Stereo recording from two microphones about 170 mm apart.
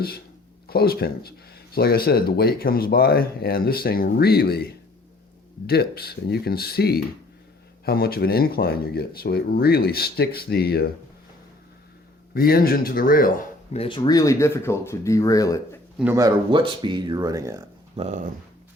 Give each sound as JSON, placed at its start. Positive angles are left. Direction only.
{"t": 0.7, "sound": "speech", "side_deg": 65}
{"t": 12.3, "sound": "speech", "side_deg": 60}
{"t": 13.7, "sound": "speech", "side_deg": 30}
{"t": 16.1, "sound": "speech", "side_deg": -25}
{"t": 17.9, "sound": "speech", "side_deg": -40}